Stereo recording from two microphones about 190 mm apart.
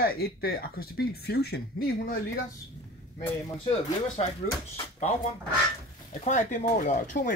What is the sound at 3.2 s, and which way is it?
Speech, 30° left (ahead or behind).